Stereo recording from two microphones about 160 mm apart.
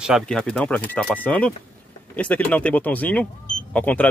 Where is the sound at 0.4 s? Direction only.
5° left (ahead or behind).